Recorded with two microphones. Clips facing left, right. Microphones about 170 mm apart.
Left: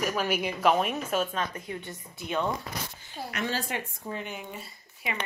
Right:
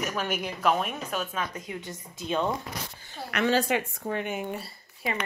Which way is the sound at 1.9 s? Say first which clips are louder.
Right 2 dB; 90° right.